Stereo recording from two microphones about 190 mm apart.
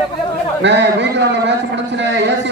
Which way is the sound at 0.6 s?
65° right (ahead or behind).